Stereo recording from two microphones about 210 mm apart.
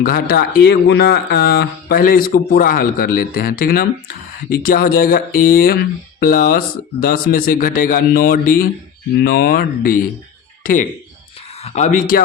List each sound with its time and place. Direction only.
0.0 s speech: 45° left (ahead or behind)